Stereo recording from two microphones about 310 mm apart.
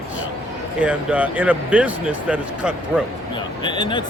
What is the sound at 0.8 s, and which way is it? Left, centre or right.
Speech, centre.